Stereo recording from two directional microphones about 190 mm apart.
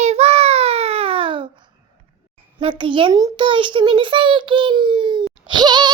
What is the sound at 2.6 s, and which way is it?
A child's voice, 25° right (ahead or behind).